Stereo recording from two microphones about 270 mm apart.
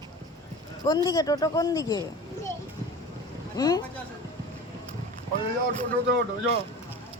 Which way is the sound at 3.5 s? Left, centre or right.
Centre.